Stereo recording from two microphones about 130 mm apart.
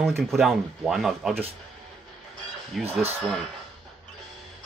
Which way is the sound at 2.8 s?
Centre (ahead or behind).